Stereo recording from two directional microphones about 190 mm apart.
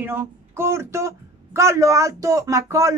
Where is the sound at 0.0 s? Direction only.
10° right (ahead or behind).